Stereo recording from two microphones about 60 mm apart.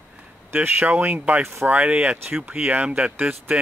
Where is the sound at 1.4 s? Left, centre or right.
Right.